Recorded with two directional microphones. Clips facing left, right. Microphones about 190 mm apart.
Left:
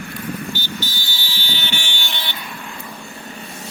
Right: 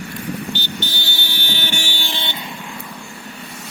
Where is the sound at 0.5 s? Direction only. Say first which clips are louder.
Right 1 dB; 65° right (ahead or behind); by 2.4 s 25° right (ahead or behind).